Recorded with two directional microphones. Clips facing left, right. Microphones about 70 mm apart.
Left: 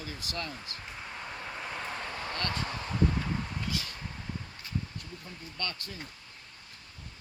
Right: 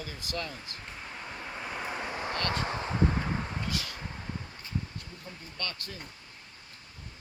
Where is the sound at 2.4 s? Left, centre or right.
Right.